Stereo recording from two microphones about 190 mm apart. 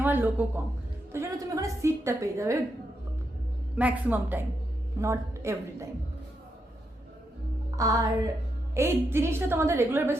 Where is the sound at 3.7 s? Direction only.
10° right (ahead or behind).